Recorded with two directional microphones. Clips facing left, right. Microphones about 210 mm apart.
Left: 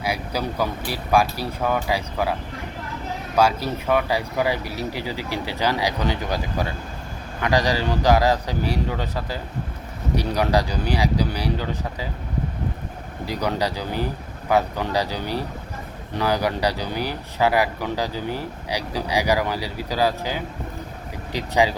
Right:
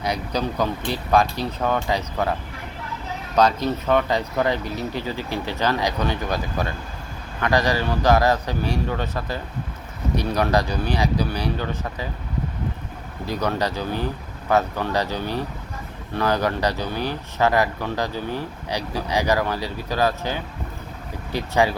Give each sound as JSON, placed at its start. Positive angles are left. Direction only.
{"t": 0.0, "sound": "speech", "side_deg": 5}
{"t": 3.3, "sound": "speech", "side_deg": 10}
{"t": 13.2, "sound": "speech", "side_deg": 15}